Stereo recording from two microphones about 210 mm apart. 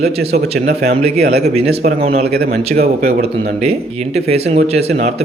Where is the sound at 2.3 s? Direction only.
45° right (ahead or behind).